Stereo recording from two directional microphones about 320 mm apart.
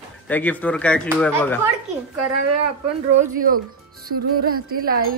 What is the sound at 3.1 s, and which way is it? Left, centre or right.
Speech, right.